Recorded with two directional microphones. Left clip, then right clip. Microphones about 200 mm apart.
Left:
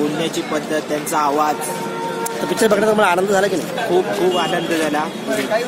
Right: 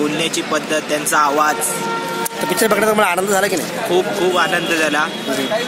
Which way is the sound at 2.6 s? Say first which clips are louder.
Even; 10° right (ahead or behind).